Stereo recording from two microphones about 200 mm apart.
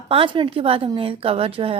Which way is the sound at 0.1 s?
25° right (ahead or behind).